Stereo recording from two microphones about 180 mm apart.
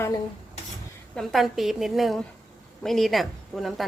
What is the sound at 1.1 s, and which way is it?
A woman's voice, centre (ahead or behind).